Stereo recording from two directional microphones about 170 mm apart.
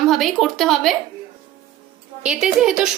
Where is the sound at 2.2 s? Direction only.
5° right (ahead or behind).